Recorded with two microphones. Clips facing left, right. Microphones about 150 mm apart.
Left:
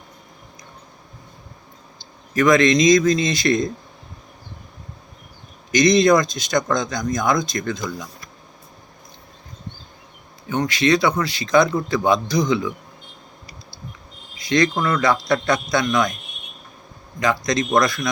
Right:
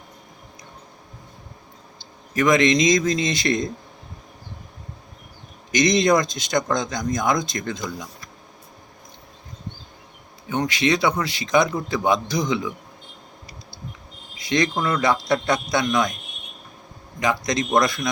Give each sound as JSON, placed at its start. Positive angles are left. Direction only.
{"t": 2.0, "sound": "speech", "side_deg": -20}
{"t": 5.7, "sound": "speech", "side_deg": -20}
{"t": 10.5, "sound": "speech", "side_deg": -15}
{"t": 14.3, "sound": "speech", "side_deg": -20}
{"t": 17.2, "sound": "speech", "side_deg": -20}